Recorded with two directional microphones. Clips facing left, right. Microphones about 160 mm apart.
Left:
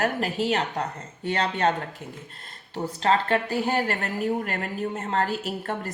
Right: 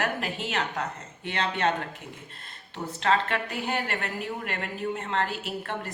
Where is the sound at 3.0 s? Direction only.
35° left (ahead or behind).